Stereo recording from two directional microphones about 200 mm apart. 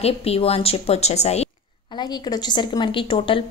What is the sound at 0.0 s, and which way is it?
A woman's voice, 30° left (ahead or behind).